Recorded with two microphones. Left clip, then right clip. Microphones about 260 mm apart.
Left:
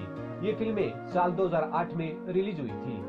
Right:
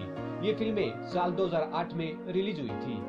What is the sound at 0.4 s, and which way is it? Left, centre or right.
Speech, centre.